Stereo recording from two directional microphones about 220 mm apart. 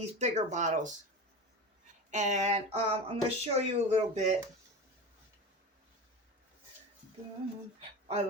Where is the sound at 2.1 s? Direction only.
35° right (ahead or behind).